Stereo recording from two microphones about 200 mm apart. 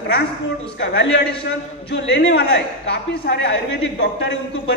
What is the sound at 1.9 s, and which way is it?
Speech, 65° left (ahead or behind).